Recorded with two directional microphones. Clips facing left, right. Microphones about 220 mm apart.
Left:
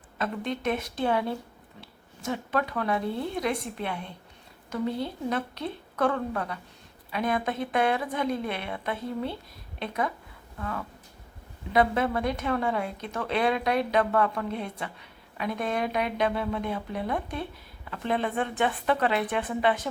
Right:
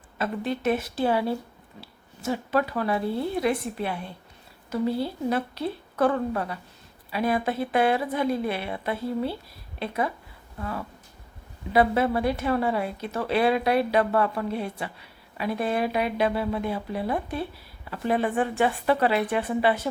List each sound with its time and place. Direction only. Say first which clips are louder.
0.2 s speech: right 3 dB; 5° right (ahead or behind)
11.7 s speech: right 3 dB; 5° right (ahead or behind)